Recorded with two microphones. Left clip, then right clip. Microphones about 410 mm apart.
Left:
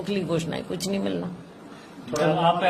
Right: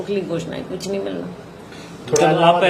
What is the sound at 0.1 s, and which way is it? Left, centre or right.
A woman's voice, left.